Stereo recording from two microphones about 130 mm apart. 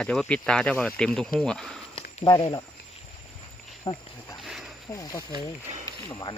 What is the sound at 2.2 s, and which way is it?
Speech, 35° left (ahead or behind).